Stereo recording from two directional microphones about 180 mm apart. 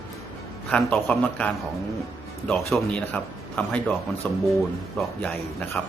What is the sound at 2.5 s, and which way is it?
A man's voice, 5° left (ahead or behind).